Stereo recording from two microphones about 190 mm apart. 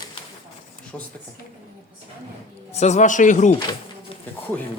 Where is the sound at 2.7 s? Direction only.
35° left (ahead or behind).